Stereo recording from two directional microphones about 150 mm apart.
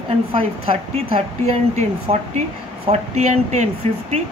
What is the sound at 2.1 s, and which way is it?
Speech, 50° right (ahead or behind).